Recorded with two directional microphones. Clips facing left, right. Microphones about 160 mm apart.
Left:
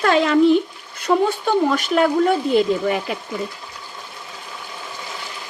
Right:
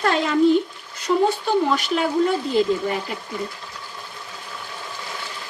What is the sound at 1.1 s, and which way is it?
Speech, 60° left (ahead or behind).